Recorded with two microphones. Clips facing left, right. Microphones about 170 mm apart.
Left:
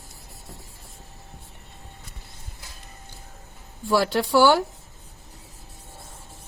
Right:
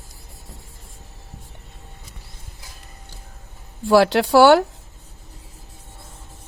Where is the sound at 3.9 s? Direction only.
80° right.